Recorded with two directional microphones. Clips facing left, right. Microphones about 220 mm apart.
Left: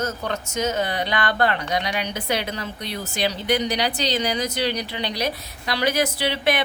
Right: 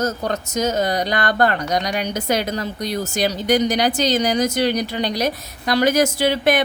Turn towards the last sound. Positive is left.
turn(degrees=-45)  # may be behind; listen again after turning